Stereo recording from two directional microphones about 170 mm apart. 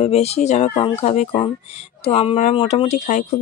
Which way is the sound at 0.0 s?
35° left (ahead or behind).